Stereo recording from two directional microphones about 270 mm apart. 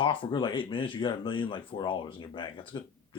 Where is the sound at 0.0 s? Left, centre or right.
Centre.